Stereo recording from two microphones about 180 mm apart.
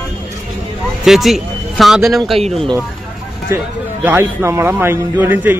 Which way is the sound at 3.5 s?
15° right (ahead or behind).